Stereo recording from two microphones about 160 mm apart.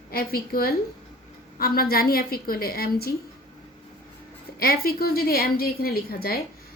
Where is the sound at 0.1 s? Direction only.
70° left (ahead or behind).